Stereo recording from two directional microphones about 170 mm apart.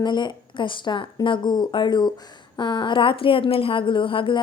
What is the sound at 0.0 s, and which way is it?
A woman's voice, 25° left (ahead or behind).